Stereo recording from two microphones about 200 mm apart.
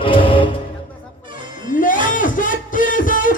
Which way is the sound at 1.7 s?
40° left (ahead or behind).